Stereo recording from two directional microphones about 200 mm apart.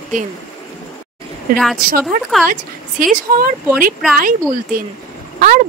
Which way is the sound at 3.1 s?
40° right (ahead or behind).